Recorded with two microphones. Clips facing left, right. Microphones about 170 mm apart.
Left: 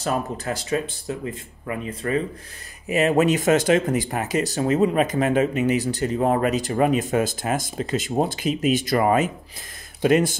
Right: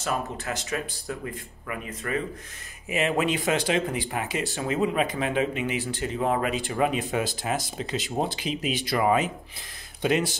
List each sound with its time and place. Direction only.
0.0 s speech: 35° left (ahead or behind)
2.9 s speech: 40° left (ahead or behind)